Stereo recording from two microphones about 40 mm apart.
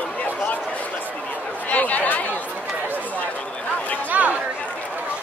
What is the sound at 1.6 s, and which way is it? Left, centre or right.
Chatter, left.